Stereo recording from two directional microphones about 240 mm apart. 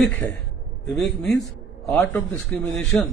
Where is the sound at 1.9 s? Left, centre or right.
Centre.